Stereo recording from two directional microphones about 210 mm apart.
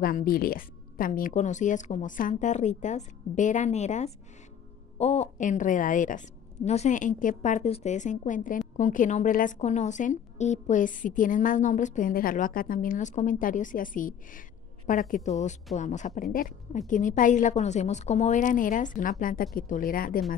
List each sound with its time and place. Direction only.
0.0 s a woman's voice: 45° left (ahead or behind)